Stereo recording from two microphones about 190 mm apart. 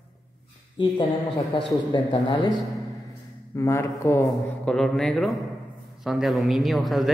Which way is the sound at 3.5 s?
15° left (ahead or behind).